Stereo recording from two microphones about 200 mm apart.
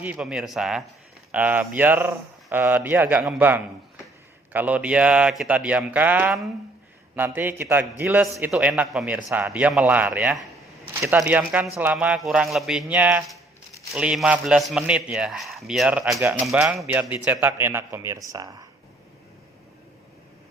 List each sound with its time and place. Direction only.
0.0 s a man's voice: 5° right (ahead or behind)